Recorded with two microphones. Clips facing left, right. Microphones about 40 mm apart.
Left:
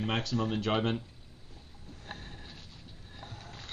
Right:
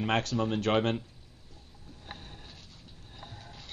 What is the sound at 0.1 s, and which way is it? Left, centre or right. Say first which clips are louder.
Speech: right 4 dB; right.